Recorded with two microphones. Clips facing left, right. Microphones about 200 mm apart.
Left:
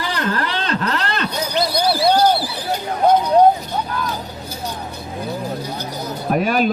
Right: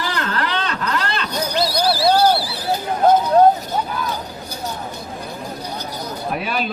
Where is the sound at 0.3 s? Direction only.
30° left (ahead or behind).